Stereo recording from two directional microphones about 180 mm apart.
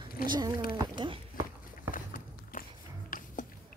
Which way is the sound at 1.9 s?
50° left (ahead or behind).